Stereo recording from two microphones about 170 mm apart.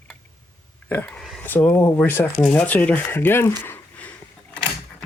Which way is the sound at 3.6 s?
10° left (ahead or behind).